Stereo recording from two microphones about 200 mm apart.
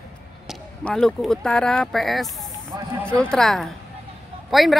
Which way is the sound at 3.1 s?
5° left (ahead or behind).